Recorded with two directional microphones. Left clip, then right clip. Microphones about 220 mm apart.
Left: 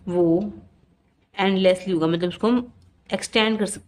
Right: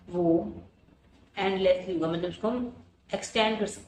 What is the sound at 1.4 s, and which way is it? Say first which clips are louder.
Speech: left 5 dB; 55° left (ahead or behind).